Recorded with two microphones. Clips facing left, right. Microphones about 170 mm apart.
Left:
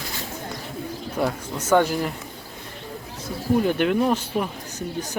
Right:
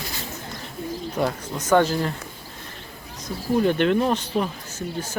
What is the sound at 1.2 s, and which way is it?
Speech, 10° left (ahead or behind).